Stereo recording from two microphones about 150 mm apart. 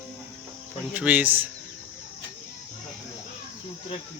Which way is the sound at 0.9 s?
10° right (ahead or behind).